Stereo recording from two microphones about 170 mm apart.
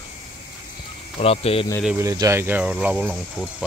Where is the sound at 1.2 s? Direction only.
35° left (ahead or behind).